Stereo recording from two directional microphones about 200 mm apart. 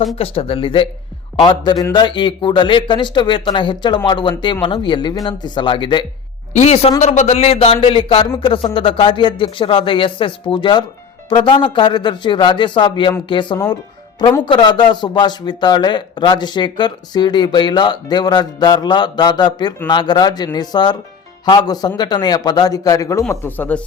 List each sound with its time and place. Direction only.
0.2 s a man's voice: 30° left (ahead or behind)
6.5 s a man's voice: 35° left (ahead or behind); by 23.8 s 10° left (ahead or behind)